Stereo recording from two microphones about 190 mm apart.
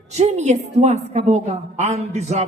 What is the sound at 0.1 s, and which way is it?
A woman's voice, 35° right (ahead or behind).